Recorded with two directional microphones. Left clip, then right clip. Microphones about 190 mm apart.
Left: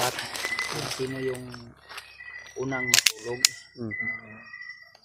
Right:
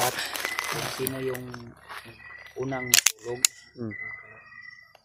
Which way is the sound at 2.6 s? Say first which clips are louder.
Even; 10° right (ahead or behind).